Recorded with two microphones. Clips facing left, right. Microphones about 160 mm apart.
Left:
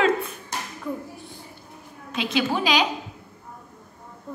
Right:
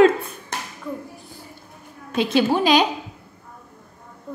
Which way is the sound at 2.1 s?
40° right (ahead or behind).